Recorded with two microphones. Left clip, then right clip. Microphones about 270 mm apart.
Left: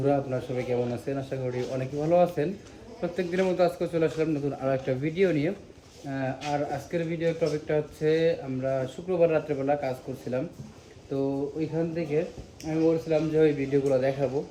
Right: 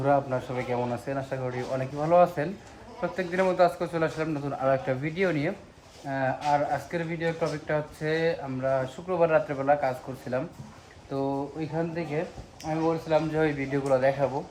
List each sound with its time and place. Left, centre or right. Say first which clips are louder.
0.0 s speech: right 2 dB; right
11.1 s speech: left 1 dB; right
12.9 s speech: right 2 dB; right